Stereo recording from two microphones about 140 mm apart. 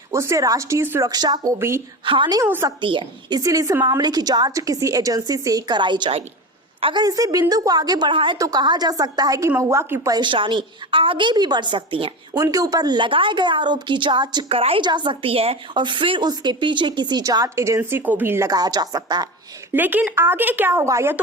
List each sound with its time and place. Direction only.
0.1 s a woman's voice: 20° right (ahead or behind)
1.5 s a woman's voice: 20° right (ahead or behind)
2.0 s a woman's voice: 35° right (ahead or behind)
2.4 s a woman's voice: 20° right (ahead or behind)
2.8 s a woman's voice: 35° right (ahead or behind)
12.4 s a woman's voice: 25° right (ahead or behind)
19.7 s speech: 15° right (ahead or behind)